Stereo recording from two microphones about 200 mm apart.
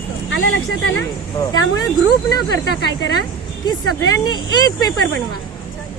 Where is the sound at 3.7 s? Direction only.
20° left (ahead or behind).